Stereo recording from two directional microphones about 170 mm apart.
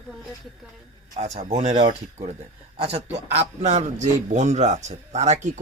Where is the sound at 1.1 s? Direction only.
40° right (ahead or behind).